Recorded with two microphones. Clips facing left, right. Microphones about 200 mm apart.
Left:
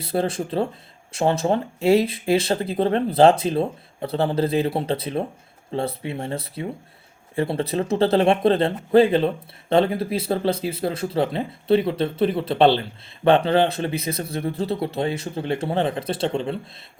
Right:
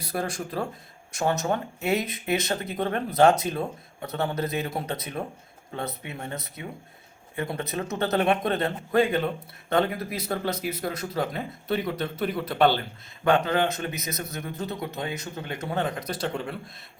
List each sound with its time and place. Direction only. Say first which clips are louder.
0.0 s speech: left 7 dB; 30° left (ahead or behind)